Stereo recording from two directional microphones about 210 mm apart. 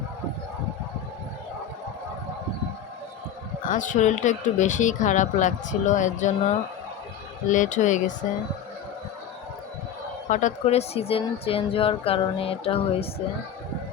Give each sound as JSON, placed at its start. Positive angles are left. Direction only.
{"t": 3.7, "sound": "speech", "side_deg": 35}
{"t": 10.2, "sound": "speech", "side_deg": 35}